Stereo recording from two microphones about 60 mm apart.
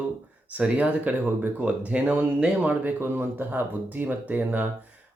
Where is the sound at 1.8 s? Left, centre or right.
Centre.